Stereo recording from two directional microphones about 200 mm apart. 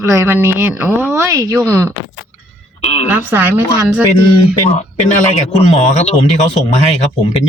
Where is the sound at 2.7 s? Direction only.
30° left (ahead or behind).